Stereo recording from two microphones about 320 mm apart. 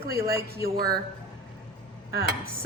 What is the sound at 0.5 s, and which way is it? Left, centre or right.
Music, right.